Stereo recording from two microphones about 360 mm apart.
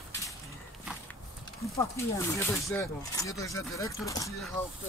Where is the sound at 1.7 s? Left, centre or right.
Centre.